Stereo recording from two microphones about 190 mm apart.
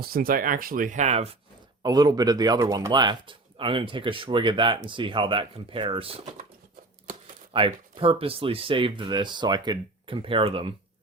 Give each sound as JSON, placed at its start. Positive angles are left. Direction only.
{"t": 0.0, "sound": "speech", "side_deg": -50}
{"t": 1.8, "sound": "speech", "side_deg": -20}
{"t": 7.5, "sound": "speech", "side_deg": -30}